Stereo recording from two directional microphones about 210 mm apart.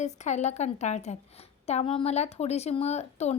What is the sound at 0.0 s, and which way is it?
A woman's voice, 35° left (ahead or behind).